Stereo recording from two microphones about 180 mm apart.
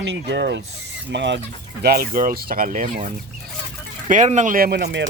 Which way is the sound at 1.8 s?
55° right (ahead or behind).